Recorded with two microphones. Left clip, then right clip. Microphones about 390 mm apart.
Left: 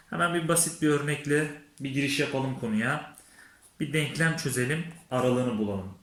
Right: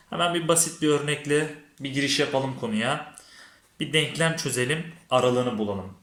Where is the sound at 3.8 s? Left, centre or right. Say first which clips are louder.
Right 4 dB; centre.